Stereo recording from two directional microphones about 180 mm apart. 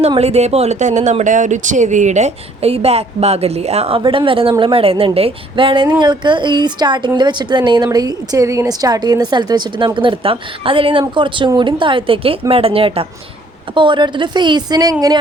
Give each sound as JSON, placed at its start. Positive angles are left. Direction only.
{"t": 0.0, "sound": "a woman's voice", "side_deg": -35}